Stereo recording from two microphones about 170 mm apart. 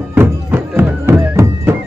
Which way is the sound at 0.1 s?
15° right (ahead or behind).